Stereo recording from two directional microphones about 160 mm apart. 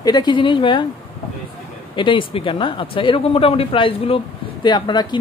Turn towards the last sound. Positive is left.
turn(degrees=25)  # may be behind; listen again after turning